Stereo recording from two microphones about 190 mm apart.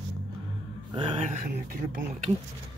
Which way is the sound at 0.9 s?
25° right (ahead or behind).